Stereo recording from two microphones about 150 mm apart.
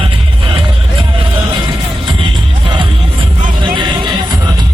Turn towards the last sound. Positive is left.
turn(degrees=-30)  # may be behind; listen again after turning